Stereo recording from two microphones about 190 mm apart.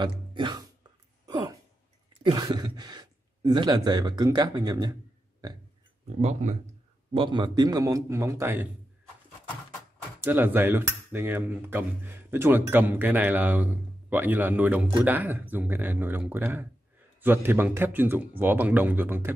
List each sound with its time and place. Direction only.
0.0 s speech: 25° right (ahead or behind)
1.2 s a sound: 20° right (ahead or behind)
2.2 s speech: 20° right (ahead or behind)
6.0 s speech: 35° right (ahead or behind)
7.2 s cutlery: 25° right (ahead or behind)
10.2 s cutlery: 10° right (ahead or behind)